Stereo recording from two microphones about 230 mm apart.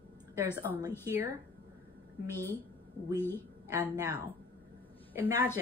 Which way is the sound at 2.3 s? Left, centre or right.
Centre.